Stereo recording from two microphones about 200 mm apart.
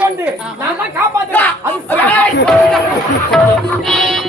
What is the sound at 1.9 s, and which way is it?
Crowd, 5° left (ahead or behind).